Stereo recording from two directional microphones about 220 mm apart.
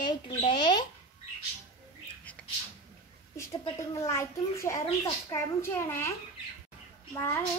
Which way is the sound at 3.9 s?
15° left (ahead or behind).